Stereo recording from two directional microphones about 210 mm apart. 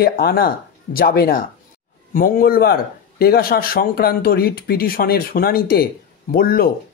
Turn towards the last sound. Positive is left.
turn(degrees=45)  # may be behind; listen again after turning